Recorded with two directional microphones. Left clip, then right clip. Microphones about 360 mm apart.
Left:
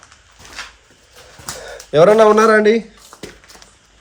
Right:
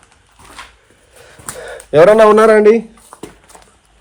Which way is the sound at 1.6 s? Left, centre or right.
Right.